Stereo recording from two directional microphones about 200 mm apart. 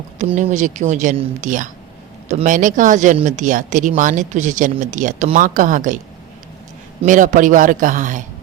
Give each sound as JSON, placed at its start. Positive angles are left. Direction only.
{"t": 0.2, "sound": "speech", "side_deg": -35}
{"t": 7.0, "sound": "speech", "side_deg": -40}